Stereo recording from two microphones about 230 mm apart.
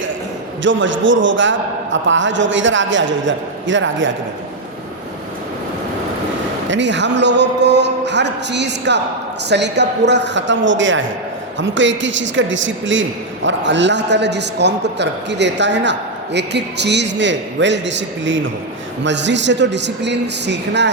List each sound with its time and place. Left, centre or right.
0.6 s a man's voice: right
6.7 s a man's voice: right